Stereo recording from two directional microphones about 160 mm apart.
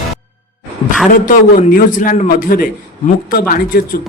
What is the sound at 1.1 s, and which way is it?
A man's voice, 60° left (ahead or behind).